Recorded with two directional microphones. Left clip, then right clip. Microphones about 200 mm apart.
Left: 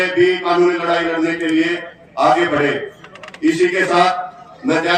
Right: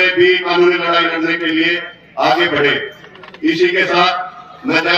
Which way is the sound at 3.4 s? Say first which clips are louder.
Right 2 dB; 40° left (ahead or behind).